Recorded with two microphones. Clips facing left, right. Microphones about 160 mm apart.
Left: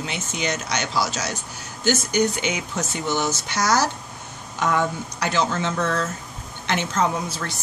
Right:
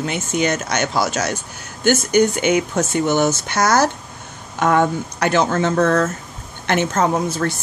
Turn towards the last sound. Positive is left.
turn(degrees=-50)  # may be behind; listen again after turning